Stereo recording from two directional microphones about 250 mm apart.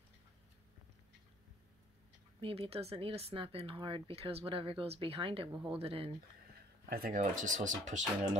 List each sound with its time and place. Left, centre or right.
2.4 s speech: right
5.5 s speech: centre
5.8 s speech: right
6.9 s speech: right